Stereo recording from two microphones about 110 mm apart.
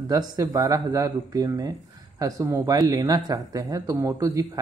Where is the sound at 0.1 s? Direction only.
40° right (ahead or behind).